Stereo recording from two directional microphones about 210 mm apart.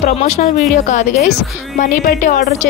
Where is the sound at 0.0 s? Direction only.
35° left (ahead or behind).